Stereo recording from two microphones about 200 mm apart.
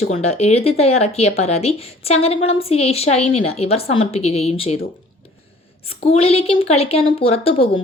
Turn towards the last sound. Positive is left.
turn(degrees=30)  # may be behind; listen again after turning